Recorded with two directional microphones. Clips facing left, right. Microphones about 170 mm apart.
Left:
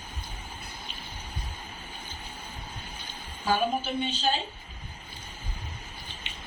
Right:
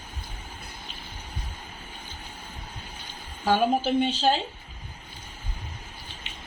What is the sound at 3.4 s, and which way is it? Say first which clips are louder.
Speech: right 4 dB; 85° right.